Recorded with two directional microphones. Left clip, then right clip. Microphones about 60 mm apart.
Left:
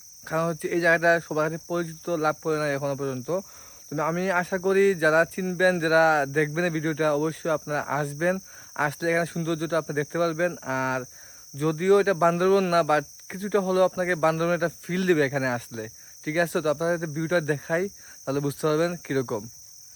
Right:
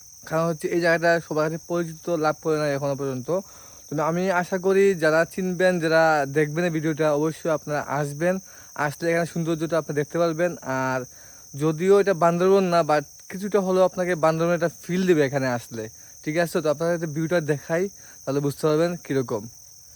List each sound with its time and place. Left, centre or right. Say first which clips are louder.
0.3 s speech: right 2 dB; right